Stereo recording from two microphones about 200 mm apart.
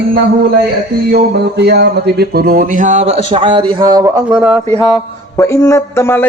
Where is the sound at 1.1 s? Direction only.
55° right (ahead or behind); by 4.6 s 10° right (ahead or behind).